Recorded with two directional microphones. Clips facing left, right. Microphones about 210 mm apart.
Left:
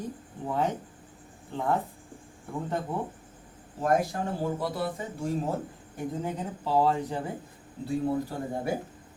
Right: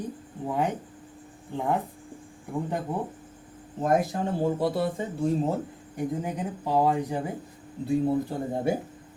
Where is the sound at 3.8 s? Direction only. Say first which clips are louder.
Right 2 dB; 20° right (ahead or behind).